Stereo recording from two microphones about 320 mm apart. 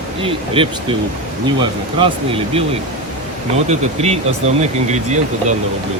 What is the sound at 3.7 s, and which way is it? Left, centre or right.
Speech, centre.